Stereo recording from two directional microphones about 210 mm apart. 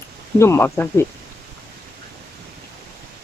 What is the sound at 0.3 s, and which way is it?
Speech, 10° left (ahead or behind).